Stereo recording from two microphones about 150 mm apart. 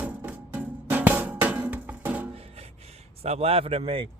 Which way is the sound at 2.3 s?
45° right (ahead or behind).